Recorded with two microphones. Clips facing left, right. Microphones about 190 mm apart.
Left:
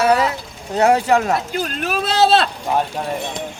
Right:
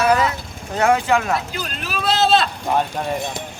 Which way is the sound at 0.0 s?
30° left (ahead or behind).